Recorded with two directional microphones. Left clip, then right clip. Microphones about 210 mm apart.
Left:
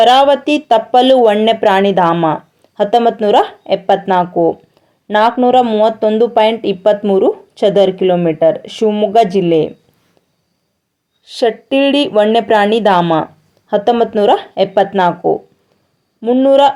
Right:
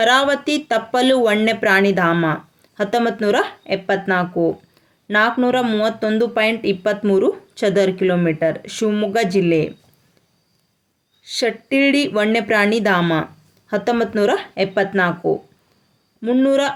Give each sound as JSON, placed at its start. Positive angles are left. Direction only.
{"t": 0.0, "sound": "speech", "side_deg": 0}
{"t": 11.3, "sound": "speech", "side_deg": 0}